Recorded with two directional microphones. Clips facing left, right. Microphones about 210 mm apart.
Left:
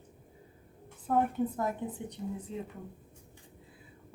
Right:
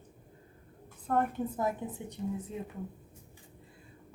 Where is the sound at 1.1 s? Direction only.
5° left (ahead or behind).